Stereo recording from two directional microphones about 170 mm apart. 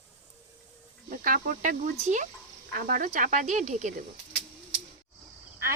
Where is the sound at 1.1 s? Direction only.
55° right (ahead or behind).